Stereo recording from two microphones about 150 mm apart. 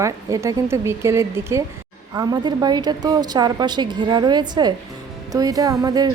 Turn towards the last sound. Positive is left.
turn(degrees=-25)  # may be behind; listen again after turning